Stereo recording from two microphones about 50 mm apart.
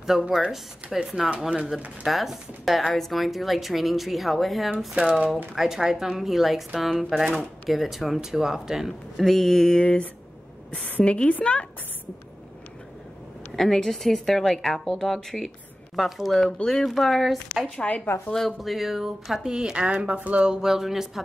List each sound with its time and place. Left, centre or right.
0.0 s speech: centre
9.2 s speech: centre
9.8 s a woman's voice: left
13.6 s speech: centre
17.7 s a woman's voice: left
18.3 s speech: centre
19.5 s speech: centre
20.6 s speech: centre